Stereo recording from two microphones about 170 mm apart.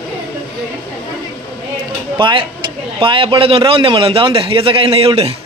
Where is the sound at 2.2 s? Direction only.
30° right (ahead or behind).